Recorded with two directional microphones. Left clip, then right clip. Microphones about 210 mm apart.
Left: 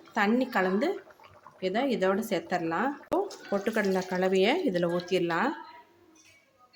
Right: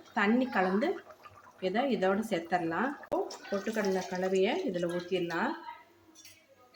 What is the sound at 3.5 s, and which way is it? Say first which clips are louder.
Speech: left 4 dB; 35° left (ahead or behind).